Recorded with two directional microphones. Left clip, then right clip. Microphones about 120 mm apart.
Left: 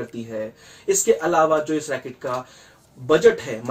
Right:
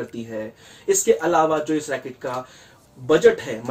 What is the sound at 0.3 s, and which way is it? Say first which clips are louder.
Speech: left 1 dB; 20° right (ahead or behind).